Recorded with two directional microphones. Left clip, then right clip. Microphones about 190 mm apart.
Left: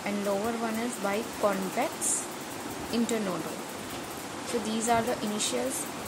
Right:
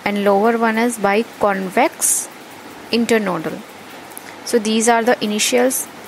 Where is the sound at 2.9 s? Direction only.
45° right (ahead or behind).